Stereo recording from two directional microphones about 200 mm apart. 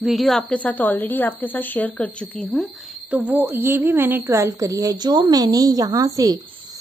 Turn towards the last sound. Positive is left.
turn(degrees=-15)  # may be behind; listen again after turning